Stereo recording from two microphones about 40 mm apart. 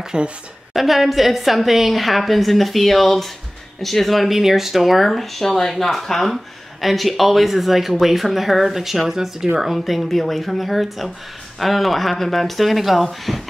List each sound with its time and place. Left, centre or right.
0.0 s a woman's voice: centre
0.7 s a woman's voice: centre